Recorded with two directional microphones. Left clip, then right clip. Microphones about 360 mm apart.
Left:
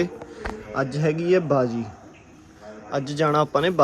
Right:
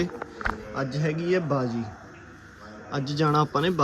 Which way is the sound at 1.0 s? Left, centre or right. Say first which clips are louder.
Left 6 dB; centre.